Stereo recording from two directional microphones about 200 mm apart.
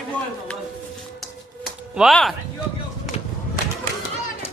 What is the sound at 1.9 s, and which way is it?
Speech, centre (ahead or behind).